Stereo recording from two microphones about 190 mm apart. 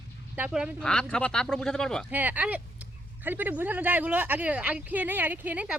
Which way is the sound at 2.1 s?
10° right (ahead or behind).